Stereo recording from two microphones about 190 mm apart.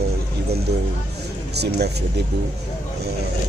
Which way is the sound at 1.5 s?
60° right (ahead or behind).